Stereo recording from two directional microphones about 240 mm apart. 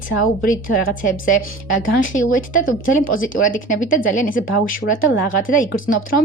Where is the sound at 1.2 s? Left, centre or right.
Left.